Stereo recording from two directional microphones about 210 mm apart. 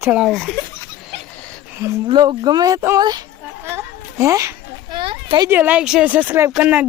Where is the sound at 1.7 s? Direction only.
15° right (ahead or behind).